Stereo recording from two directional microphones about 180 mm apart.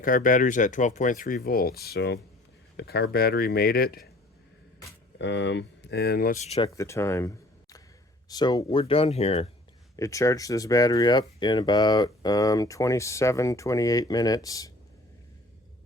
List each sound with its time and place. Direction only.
0.0 s speech: 50° left (ahead or behind)
5.1 s speech: 80° left; by 6.4 s 55° left (ahead or behind)
6.4 s speech: 35° left (ahead or behind)
6.7 s speech: 15° left (ahead or behind); by 9.5 s 35° left (ahead or behind)
9.9 s speech: 15° left (ahead or behind)